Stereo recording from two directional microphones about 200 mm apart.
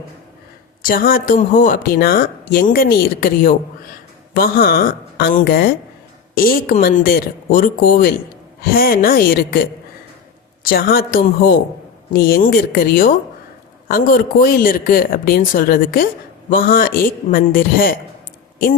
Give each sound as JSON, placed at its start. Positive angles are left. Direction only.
{"t": 0.8, "sound": "speech", "side_deg": 45}